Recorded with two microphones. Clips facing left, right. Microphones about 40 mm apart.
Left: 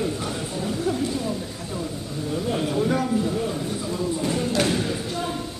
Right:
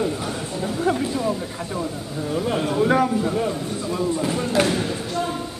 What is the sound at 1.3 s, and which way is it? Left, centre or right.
Speech, right.